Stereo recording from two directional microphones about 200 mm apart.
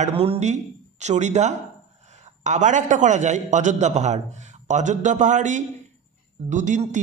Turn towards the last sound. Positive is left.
turn(degrees=-35)  # may be behind; listen again after turning